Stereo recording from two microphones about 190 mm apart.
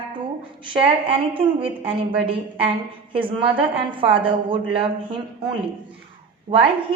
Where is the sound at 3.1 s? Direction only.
30° right (ahead or behind).